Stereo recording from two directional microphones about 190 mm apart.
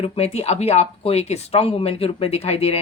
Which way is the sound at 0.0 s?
30° left (ahead or behind).